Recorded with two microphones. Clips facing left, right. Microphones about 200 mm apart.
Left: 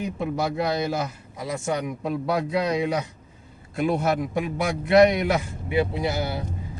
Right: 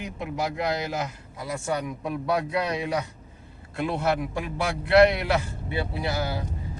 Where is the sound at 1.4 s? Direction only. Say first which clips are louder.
Left 2 dB; 20° left (ahead or behind).